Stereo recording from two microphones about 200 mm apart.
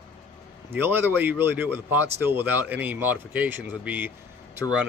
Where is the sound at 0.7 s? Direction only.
10° right (ahead or behind).